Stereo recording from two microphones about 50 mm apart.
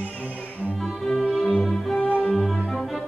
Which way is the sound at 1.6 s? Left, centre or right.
Left.